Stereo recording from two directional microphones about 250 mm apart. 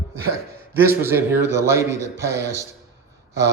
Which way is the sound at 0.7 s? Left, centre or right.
Centre.